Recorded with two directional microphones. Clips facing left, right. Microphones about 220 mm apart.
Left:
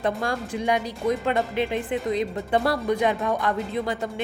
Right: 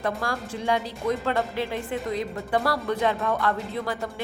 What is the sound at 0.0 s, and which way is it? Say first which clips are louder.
A woman's voice: left 3 dB; 20° left (ahead or behind).